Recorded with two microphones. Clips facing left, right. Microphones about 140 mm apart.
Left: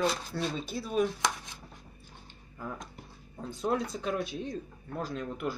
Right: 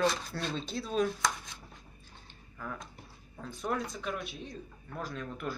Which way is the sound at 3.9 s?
35° left (ahead or behind).